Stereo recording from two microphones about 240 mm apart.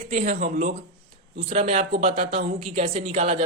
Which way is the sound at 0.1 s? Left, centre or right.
Right.